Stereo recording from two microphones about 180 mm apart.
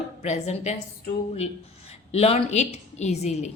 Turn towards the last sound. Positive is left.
turn(degrees=40)  # may be behind; listen again after turning